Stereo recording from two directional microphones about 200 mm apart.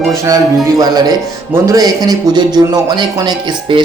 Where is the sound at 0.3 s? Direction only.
20° right (ahead or behind).